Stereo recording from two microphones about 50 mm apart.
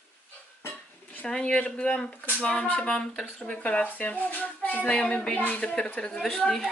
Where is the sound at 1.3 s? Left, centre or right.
Left.